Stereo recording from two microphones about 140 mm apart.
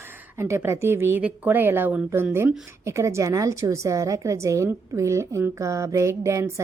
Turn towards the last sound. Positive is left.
turn(degrees=-20)  # may be behind; listen again after turning